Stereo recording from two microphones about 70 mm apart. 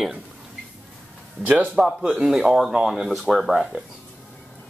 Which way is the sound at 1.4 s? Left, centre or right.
Centre.